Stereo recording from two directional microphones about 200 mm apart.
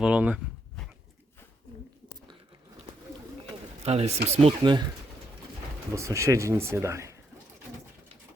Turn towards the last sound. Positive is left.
turn(degrees=-15)  # may be behind; listen again after turning